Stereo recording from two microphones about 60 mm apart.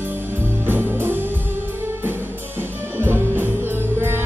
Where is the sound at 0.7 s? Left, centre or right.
Right.